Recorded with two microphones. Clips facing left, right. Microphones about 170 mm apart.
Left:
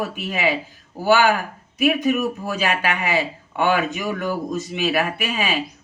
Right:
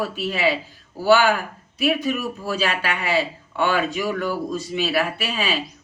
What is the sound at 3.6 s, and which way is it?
Speech, 20° left (ahead or behind).